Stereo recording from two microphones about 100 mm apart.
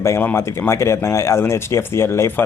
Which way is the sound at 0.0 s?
25° left (ahead or behind).